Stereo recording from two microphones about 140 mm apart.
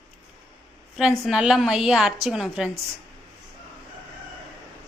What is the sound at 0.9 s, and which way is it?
A woman's voice, 5° right (ahead or behind).